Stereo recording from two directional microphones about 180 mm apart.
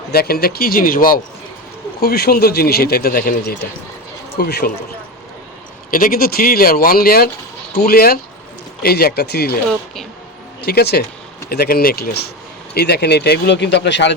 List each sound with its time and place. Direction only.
0.1 s speech: 60° left (ahead or behind)
5.9 s speech: 55° left (ahead or behind)
10.7 s speech: 60° left (ahead or behind); by 14.2 s 80° left